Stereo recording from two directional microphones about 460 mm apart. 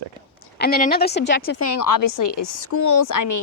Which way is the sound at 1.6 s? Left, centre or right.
Left.